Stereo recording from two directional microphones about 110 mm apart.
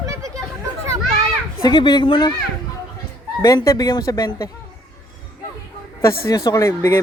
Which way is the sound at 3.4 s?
35° left (ahead or behind).